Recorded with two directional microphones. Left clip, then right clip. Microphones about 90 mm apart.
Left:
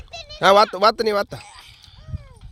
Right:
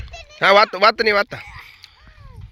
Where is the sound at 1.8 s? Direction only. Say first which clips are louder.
Right 4 dB; 40° left (ahead or behind).